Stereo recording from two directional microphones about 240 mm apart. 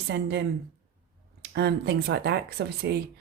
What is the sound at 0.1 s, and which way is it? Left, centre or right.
Speech, right.